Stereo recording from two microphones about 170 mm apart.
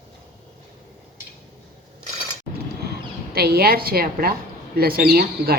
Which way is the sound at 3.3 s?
65° right (ahead or behind).